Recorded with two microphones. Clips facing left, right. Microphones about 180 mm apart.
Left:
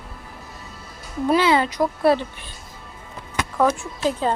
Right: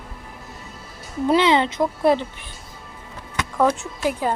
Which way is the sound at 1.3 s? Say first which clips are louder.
Right 1 dB; 20° right (ahead or behind).